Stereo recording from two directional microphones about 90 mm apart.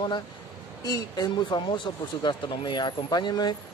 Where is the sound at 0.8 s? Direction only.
45° left (ahead or behind).